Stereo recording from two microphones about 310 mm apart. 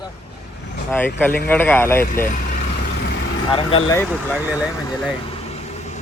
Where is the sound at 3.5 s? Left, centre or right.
Centre.